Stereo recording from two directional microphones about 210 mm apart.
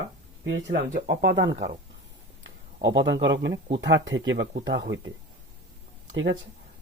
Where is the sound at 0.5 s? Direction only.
50° right (ahead or behind).